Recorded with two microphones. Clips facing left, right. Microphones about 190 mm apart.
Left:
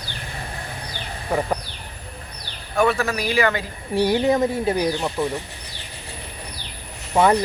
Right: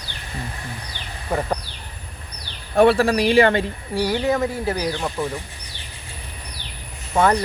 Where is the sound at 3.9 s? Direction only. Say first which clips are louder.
Left 3 dB; 20° left (ahead or behind).